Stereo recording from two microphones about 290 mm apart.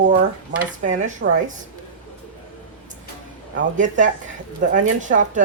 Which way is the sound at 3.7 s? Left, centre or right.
Right.